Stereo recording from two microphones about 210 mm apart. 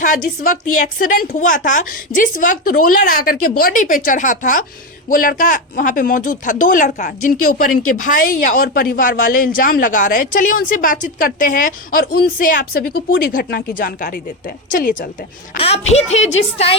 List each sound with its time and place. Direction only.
0.0 s speech: 40° left (ahead or behind)
15.5 s speech: 30° left (ahead or behind)